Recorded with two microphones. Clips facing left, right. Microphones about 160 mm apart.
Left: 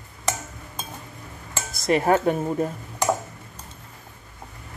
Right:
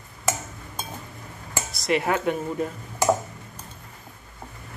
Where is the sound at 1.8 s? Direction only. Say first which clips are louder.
Left 4 dB; 40° left (ahead or behind).